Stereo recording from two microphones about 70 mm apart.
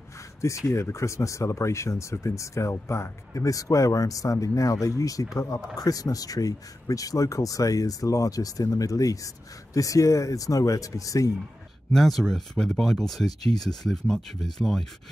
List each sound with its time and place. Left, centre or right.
0.4 s speech: left
11.9 s speech: centre